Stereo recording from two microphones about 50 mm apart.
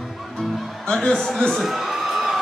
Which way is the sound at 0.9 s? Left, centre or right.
Centre.